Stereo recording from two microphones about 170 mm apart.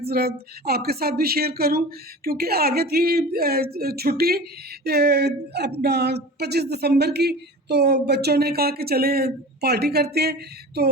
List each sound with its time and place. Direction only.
0.0 s speech: 65° right (ahead or behind)